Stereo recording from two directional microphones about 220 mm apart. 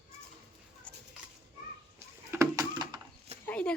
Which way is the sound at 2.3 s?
15° right (ahead or behind).